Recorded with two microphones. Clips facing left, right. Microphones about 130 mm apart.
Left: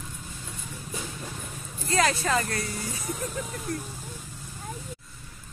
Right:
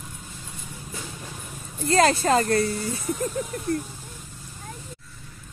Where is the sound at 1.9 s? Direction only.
35° right (ahead or behind).